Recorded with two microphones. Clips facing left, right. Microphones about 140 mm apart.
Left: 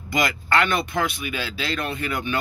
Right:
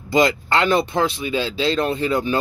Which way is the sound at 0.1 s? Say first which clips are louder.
Right 5 dB; 25° right (ahead or behind).